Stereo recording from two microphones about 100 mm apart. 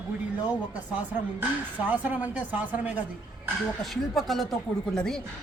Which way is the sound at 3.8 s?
Centre (ahead or behind).